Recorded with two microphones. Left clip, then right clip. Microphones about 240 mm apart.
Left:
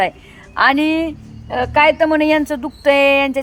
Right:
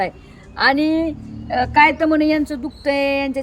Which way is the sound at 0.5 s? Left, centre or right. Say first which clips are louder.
Left 2 dB; centre.